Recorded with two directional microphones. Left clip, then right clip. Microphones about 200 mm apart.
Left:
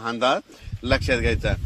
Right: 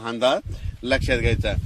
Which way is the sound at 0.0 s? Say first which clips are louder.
Right 1 dB; 20° left (ahead or behind).